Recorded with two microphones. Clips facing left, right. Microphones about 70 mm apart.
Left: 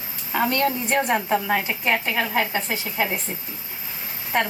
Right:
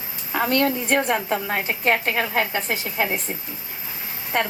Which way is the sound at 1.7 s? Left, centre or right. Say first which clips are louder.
Right 2 dB; right.